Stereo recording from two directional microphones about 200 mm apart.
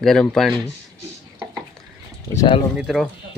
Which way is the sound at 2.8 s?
Centre (ahead or behind).